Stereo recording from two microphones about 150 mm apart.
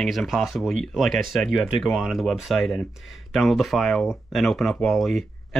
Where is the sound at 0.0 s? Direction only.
Centre (ahead or behind).